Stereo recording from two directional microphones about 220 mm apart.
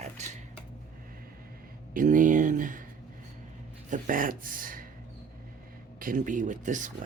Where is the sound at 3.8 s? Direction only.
35° right (ahead or behind).